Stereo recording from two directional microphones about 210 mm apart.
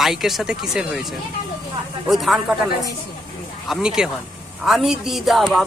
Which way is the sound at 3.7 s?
5° right (ahead or behind).